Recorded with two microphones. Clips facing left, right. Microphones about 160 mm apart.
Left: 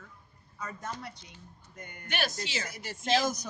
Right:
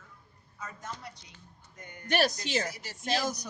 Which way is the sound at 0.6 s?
60° left (ahead or behind).